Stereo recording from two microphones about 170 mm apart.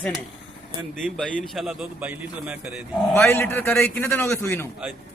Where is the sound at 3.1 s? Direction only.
15° left (ahead or behind).